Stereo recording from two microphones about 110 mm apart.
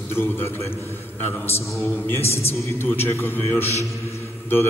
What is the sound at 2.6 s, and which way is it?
A man's voice, 20° left (ahead or behind).